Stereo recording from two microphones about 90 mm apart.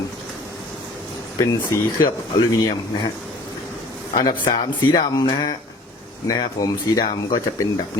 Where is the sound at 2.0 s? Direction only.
45° left (ahead or behind).